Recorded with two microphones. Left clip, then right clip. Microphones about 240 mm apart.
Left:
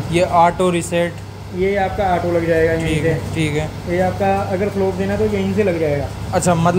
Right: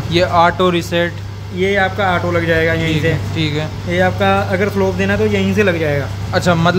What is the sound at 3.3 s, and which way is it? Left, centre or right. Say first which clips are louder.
Speech: right 1 dB; centre.